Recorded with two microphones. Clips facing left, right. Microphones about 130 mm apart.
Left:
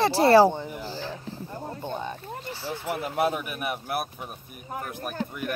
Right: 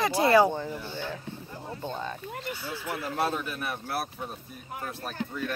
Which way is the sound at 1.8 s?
15° left (ahead or behind).